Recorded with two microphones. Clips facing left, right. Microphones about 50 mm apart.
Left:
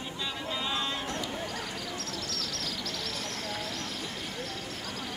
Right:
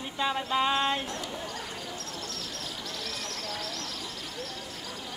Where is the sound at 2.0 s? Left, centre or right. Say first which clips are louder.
Left 2 dB; right.